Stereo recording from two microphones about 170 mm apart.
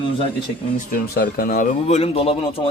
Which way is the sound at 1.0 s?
60° left (ahead or behind).